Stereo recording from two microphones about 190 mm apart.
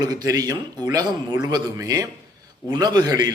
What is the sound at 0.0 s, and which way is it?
A man's voice, 20° right (ahead or behind).